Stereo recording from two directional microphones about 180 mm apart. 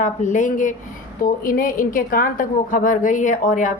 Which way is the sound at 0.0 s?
45° left (ahead or behind).